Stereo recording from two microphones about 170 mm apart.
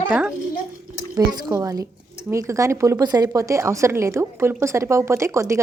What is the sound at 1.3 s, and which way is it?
A woman's voice, 20° right (ahead or behind).